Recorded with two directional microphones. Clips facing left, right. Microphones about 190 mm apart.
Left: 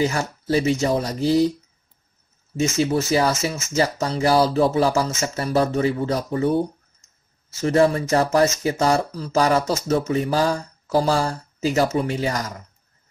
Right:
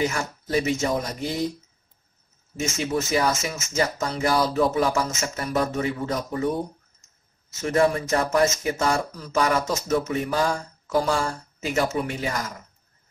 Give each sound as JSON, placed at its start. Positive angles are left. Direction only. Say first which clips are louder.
{"t": 0.1, "sound": "speech", "louder": "left 4 dB", "side_deg": 35}
{"t": 2.8, "sound": "speech", "louder": "left 3 dB", "side_deg": 30}
{"t": 7.6, "sound": "speech", "louder": "left 3 dB", "side_deg": 30}